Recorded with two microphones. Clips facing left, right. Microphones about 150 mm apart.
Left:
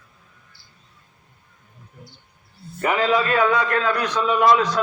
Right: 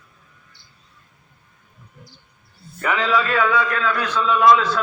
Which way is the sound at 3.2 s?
35° left (ahead or behind).